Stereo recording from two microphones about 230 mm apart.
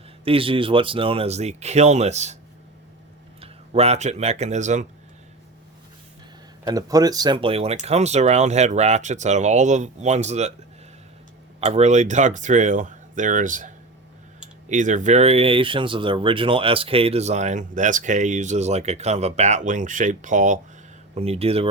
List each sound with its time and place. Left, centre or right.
0.3 s speech: right
3.4 s speech: right
6.7 s speech: centre
11.6 s speech: right